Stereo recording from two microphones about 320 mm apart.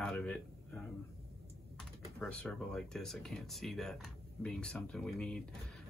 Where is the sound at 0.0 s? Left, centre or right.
Centre.